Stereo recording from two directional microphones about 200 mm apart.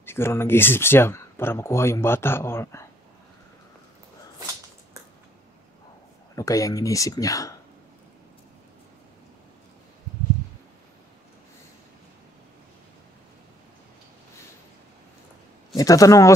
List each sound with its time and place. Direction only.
0.0 s speech: 10° left (ahead or behind)
6.3 s speech: 15° left (ahead or behind)
15.7 s speech: 15° left (ahead or behind)